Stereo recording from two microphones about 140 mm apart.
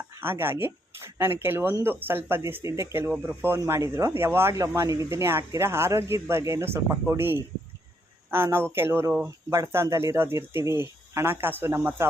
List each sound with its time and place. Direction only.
0.1 s speech: 15° right (ahead or behind)